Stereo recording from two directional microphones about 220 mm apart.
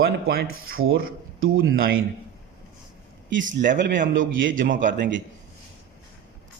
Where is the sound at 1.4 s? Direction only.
60° right (ahead or behind).